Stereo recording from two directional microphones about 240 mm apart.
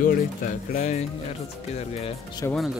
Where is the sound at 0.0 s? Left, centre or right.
Left.